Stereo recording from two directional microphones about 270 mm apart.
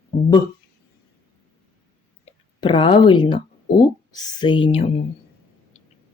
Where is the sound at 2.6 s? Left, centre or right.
Centre.